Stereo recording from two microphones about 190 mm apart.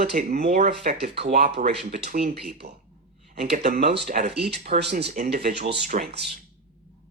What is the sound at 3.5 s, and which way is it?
Speech, 50° right (ahead or behind).